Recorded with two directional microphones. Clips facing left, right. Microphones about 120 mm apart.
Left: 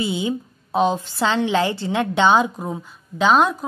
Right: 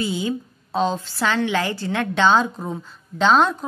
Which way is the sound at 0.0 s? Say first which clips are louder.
Left 1 dB; 20° left (ahead or behind).